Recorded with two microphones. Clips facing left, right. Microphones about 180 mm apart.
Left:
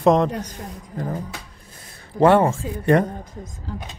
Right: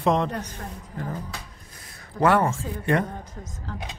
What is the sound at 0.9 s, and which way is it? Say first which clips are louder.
Speech: left 5 dB; 40° left (ahead or behind).